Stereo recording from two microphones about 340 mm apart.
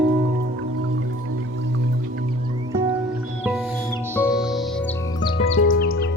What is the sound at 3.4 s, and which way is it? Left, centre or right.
Music, centre.